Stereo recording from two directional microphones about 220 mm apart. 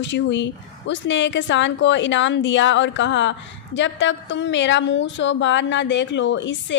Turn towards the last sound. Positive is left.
turn(degrees=55)  # may be behind; listen again after turning